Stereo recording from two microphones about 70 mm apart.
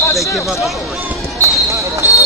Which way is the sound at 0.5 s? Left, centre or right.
Centre.